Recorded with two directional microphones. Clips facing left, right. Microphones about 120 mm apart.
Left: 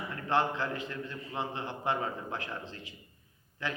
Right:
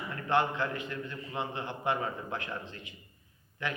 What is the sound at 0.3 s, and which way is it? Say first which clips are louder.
A man's voice: right 1 dB; 30° left (ahead or behind).